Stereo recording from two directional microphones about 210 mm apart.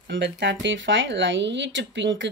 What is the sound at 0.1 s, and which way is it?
Speech, 55° right (ahead or behind).